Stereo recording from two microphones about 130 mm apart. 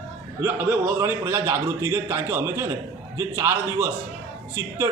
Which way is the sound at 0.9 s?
20° right (ahead or behind).